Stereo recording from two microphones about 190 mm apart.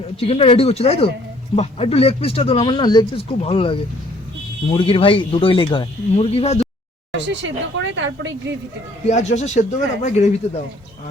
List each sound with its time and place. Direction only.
0.2 s speech: 30° left (ahead or behind)
7.1 s a woman's voice: 75° right (ahead or behind)
9.0 s speech: 35° left (ahead or behind)